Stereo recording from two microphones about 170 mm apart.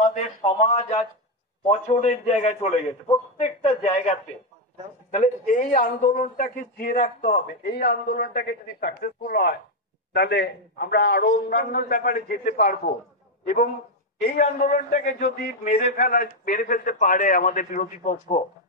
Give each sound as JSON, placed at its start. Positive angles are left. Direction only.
{"t": 0.0, "sound": "a man's voice", "side_deg": 40}
{"t": 5.2, "sound": "a man's voice", "side_deg": 50}
{"t": 10.1, "sound": "speech", "side_deg": 70}
{"t": 14.2, "sound": "a man's voice", "side_deg": 50}